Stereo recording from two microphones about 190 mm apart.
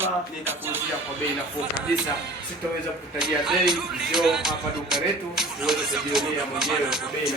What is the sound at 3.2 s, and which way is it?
Music, 5° right (ahead or behind).